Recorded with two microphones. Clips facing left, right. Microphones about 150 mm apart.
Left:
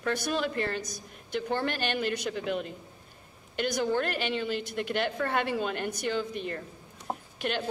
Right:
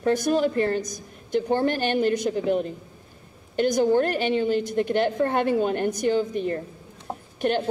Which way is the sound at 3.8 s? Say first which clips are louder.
Right 8 dB; 20° right (ahead or behind).